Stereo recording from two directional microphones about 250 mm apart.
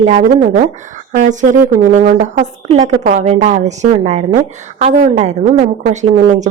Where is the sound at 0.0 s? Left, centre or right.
Right.